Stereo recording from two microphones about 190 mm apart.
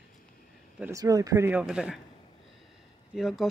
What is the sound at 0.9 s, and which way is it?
Speech, 20° right (ahead or behind).